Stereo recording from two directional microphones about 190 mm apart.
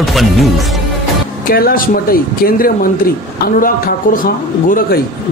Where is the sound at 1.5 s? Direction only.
50° left (ahead or behind).